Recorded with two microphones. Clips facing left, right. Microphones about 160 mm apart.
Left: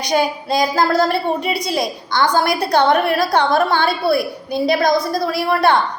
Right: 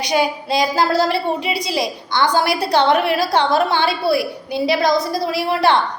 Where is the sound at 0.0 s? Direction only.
45° left (ahead or behind).